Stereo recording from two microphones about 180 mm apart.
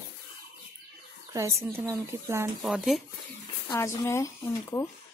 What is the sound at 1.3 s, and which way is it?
A woman's voice, 15° right (ahead or behind).